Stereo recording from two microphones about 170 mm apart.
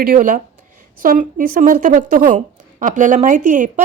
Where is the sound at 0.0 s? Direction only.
55° right (ahead or behind).